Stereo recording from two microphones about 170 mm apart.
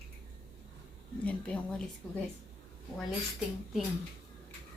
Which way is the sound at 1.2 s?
10° left (ahead or behind).